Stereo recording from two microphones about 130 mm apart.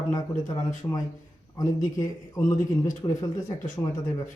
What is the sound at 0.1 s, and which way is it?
Speech, 25° left (ahead or behind).